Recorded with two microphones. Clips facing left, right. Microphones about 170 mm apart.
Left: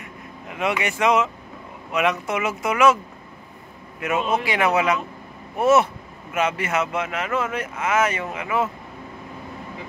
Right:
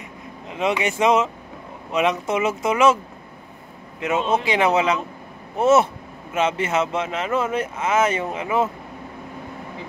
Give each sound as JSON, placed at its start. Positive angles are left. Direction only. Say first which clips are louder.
{"t": 0.5, "sound": "speech", "louder": "right 2 dB", "side_deg": -25}
{"t": 4.1, "sound": "speech", "louder": "right 2 dB", "side_deg": -25}